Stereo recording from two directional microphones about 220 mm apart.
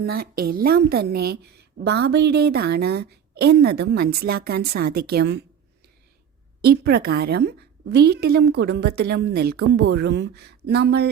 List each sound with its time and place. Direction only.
0.0 s a woman's voice: 45° right (ahead or behind)
6.6 s a woman's voice: 45° right (ahead or behind)